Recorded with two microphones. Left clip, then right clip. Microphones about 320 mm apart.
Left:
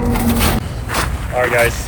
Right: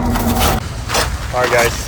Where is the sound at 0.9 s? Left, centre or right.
Centre.